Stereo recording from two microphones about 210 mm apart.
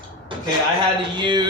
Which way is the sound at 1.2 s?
20° right (ahead or behind).